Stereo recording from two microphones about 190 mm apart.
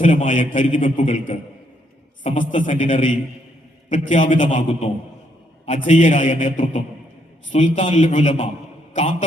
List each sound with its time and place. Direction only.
0.0 s a man's voice: 40° left (ahead or behind)